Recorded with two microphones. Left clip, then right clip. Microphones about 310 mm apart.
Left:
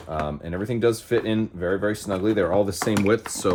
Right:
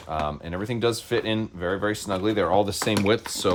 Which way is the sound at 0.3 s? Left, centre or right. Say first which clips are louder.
Left 1 dB; centre.